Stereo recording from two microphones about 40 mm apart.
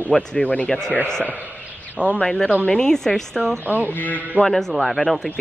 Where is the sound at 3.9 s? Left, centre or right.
Left.